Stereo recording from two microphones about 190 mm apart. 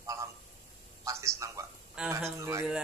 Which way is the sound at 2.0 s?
5° right (ahead or behind).